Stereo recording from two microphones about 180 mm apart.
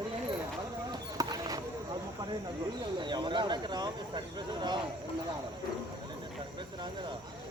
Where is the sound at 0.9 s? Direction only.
20° right (ahead or behind).